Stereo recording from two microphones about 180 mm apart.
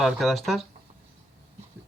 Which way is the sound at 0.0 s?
Centre (ahead or behind).